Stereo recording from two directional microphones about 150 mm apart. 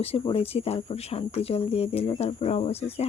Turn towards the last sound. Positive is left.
turn(degrees=45)  # may be behind; listen again after turning